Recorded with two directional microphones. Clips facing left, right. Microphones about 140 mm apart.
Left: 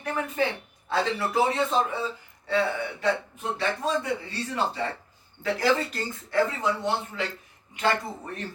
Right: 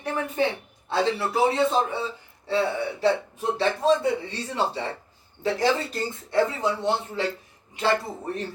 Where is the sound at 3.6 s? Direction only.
30° right (ahead or behind).